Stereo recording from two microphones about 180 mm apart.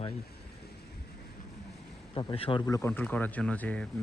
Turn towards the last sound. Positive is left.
turn(degrees=10)  # may be behind; listen again after turning